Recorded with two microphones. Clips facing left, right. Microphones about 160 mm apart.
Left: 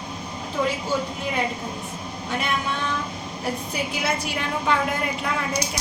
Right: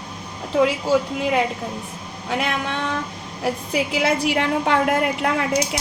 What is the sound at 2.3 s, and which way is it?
A woman's voice, 90° right.